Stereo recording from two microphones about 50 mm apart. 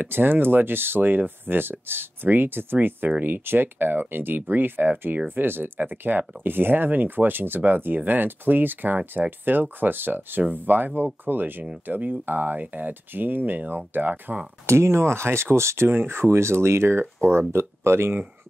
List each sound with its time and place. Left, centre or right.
0.0 s speech: right
14.7 s speech: right
15.9 s speech: right